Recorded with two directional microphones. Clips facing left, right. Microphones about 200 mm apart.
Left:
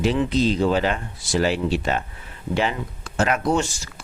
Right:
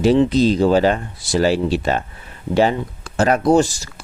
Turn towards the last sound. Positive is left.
turn(degrees=-40)  # may be behind; listen again after turning